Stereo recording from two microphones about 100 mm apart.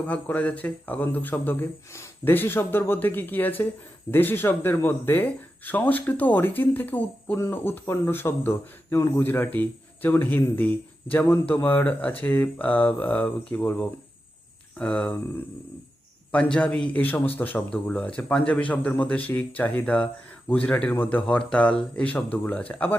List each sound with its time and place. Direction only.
0.1 s speech: 15° left (ahead or behind)
16.3 s speech: 15° left (ahead or behind)